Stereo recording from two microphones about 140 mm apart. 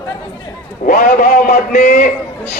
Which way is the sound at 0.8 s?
80° left.